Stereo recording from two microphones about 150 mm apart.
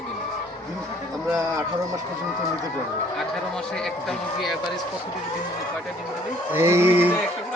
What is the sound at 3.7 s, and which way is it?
Speech, centre (ahead or behind).